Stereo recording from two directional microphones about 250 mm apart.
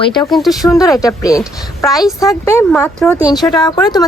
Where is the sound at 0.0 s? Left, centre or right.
Centre.